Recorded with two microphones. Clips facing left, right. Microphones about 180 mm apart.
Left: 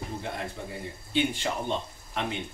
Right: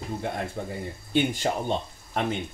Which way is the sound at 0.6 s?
50° right (ahead or behind).